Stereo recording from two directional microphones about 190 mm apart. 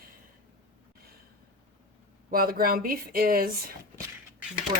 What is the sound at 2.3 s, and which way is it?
Speech, 50° right (ahead or behind).